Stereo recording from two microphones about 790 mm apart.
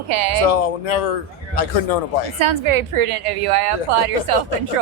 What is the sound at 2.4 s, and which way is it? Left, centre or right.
A woman's voice, right.